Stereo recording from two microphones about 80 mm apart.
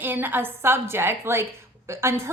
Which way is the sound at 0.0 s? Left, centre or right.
Right.